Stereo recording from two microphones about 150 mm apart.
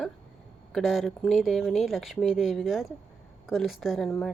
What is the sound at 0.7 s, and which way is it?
A woman's voice, centre (ahead or behind).